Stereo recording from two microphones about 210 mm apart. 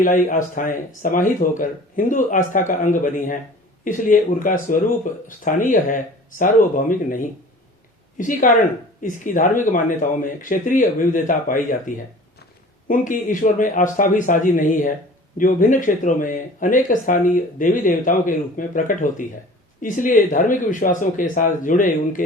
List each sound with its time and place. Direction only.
0.0 s speech: 40° left (ahead or behind)
12.9 s speech: 40° left (ahead or behind)